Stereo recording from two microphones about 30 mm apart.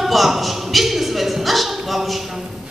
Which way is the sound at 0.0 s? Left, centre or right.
Centre.